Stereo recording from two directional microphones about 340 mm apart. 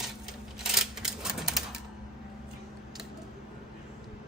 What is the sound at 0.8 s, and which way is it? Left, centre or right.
Typewriter, centre.